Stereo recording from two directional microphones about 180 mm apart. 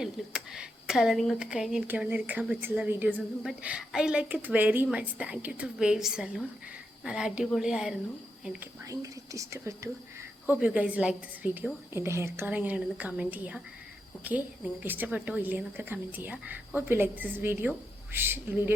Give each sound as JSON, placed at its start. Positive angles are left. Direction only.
{"t": 0.0, "sound": "a woman's voice", "side_deg": -5}
{"t": 8.8, "sound": "a woman's voice", "side_deg": -20}